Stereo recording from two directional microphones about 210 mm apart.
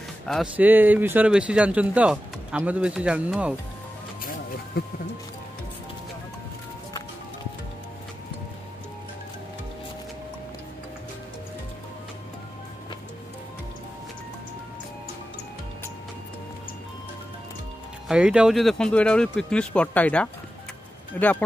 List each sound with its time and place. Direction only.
0.3 s speech: 5° right (ahead or behind)
4.7 s speech: 45° left (ahead or behind)
18.0 s speech: 5° right (ahead or behind)